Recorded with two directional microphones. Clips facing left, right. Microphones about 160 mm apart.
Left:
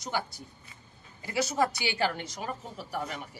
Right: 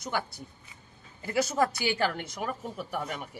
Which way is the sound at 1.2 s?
50° right (ahead or behind).